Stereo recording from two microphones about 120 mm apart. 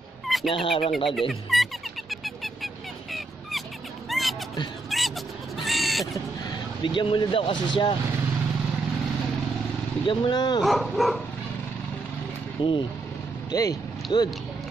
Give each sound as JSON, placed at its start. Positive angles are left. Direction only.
{"t": 0.5, "sound": "speech", "side_deg": 50}
{"t": 0.9, "sound": "speech", "side_deg": 0}
{"t": 1.5, "sound": "a sound", "side_deg": 0}
{"t": 5.6, "sound": "crow", "side_deg": 0}
{"t": 6.8, "sound": "speech", "side_deg": 40}
{"t": 10.0, "sound": "speech", "side_deg": 40}
{"t": 10.6, "sound": "speech", "side_deg": 0}
{"t": 12.6, "sound": "speech", "side_deg": 40}
{"t": 13.5, "sound": "speech", "side_deg": 30}